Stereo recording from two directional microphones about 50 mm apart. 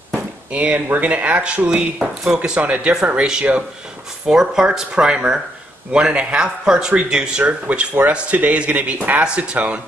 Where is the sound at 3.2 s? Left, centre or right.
Centre; by 9.2 s right.